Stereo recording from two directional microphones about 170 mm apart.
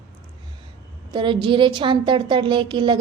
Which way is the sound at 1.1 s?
30° right (ahead or behind).